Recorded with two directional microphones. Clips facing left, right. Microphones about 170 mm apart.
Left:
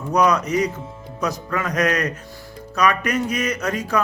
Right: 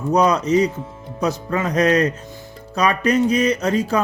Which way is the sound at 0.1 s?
30° right (ahead or behind).